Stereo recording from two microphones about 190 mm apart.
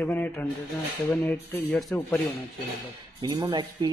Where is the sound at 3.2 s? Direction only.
25° right (ahead or behind).